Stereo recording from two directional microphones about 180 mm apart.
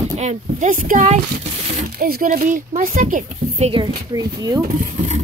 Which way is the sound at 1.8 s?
55° right (ahead or behind).